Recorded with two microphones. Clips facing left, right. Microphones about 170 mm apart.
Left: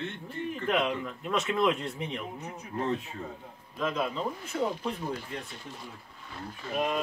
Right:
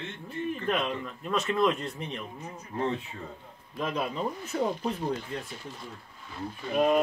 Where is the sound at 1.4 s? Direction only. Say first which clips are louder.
Right 1 dB; centre (ahead or behind).